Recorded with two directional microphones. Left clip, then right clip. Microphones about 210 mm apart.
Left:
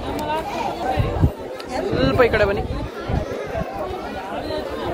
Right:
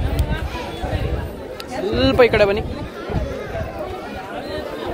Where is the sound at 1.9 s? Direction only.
45° right (ahead or behind).